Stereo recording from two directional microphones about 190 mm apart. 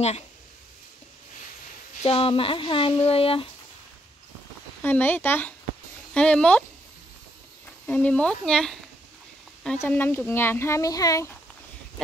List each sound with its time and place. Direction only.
2.0 s speech: 30° left (ahead or behind)
4.8 s speech: 10° left (ahead or behind)
7.6 s speech: 10° left (ahead or behind)